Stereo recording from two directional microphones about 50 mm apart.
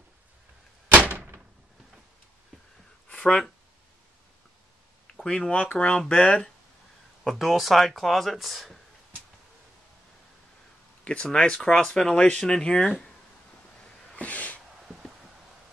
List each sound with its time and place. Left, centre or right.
0.9 s door: right
3.1 s a sound: left
5.2 s speech: centre
7.2 s speech: centre
11.2 s speech: centre
14.1 s gasp: left
14.9 s a sound: centre